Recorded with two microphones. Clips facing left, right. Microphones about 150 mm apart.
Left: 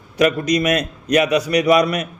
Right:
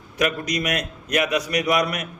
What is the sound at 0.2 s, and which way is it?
A man's voice, 35° left (ahead or behind).